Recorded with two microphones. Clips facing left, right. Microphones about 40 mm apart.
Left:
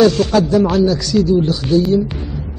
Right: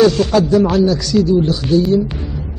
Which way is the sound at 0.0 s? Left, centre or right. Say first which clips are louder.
Even; centre.